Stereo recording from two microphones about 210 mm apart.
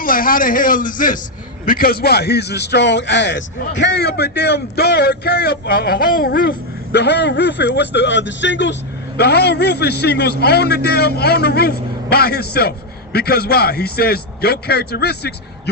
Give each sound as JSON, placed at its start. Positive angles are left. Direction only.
{"t": 0.0, "sound": "a man's voice", "side_deg": 40}